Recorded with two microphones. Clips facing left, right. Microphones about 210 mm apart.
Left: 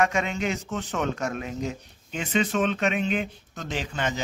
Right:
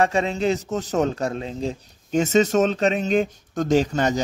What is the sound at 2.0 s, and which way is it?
Speech, 45° right (ahead or behind).